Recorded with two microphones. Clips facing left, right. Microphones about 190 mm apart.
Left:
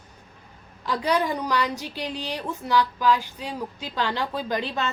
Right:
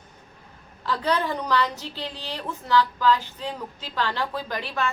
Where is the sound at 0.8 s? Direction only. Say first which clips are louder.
Left 1 dB; 15° left (ahead or behind).